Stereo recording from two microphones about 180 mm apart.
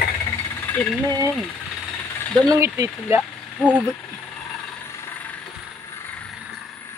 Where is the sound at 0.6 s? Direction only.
15° left (ahead or behind).